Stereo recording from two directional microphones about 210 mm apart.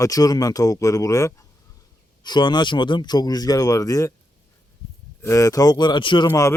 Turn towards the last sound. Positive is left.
turn(degrees=15)  # may be behind; listen again after turning